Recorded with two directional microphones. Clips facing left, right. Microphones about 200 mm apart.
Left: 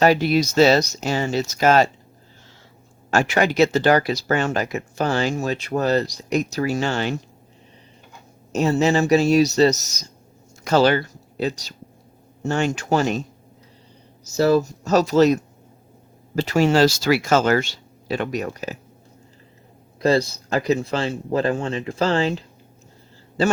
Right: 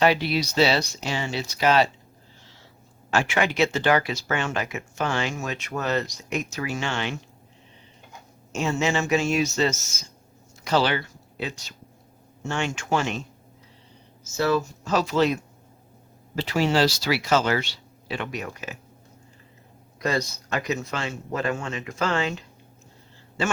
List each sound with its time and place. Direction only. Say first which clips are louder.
0.0 s speech: left 5 dB; 45° left (ahead or behind)
3.1 s speech: left 4 dB; 40° left (ahead or behind)
8.5 s speech: left 6 dB; 40° left (ahead or behind)
14.3 s speech: left 6 dB; 40° left (ahead or behind)
20.0 s speech: left 8 dB; 30° left (ahead or behind)